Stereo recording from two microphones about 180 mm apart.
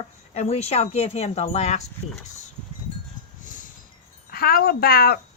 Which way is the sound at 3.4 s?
45° left (ahead or behind).